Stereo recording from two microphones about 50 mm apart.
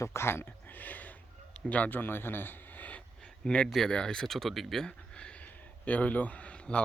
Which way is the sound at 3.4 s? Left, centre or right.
Centre.